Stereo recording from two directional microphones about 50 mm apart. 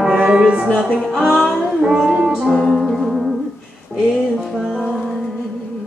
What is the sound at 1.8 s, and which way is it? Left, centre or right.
Music, centre.